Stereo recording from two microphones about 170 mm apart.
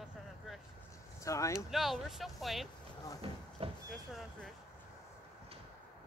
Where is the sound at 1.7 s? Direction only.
Centre (ahead or behind).